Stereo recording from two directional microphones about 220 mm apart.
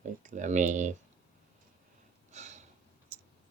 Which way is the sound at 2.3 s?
30° right (ahead or behind).